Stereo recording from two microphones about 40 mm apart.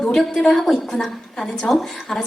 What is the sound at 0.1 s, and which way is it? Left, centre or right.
Speech, centre.